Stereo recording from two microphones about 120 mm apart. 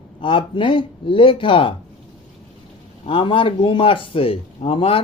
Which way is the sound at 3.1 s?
45° left (ahead or behind).